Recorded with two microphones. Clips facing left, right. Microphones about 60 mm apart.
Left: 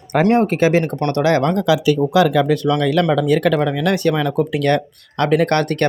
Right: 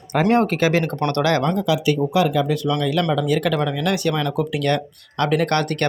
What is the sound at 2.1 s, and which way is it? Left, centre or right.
Speech, left.